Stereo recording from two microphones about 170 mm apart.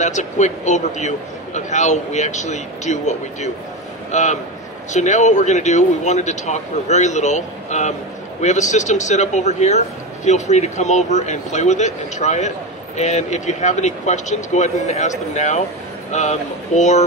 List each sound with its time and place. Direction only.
0.0 s a man's voice: 45° left (ahead or behind)